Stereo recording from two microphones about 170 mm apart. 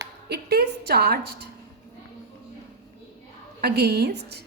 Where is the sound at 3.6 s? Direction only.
70° right (ahead or behind).